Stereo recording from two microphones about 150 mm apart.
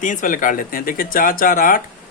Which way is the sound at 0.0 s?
60° left (ahead or behind).